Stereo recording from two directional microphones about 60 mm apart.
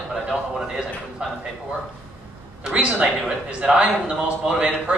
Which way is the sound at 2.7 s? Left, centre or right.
Centre.